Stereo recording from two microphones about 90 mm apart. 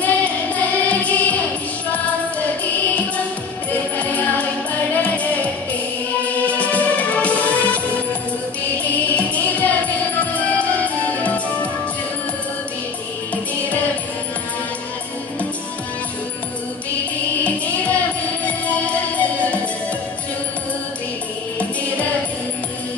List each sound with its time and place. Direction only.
0.0 s music: 15° left (ahead or behind)
3.9 s music: 15° left (ahead or behind)
8.8 s music: 15° left (ahead or behind)
17.4 s music: 15° left (ahead or behind)